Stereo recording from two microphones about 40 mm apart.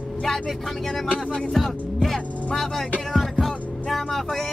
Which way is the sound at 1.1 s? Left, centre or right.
Left.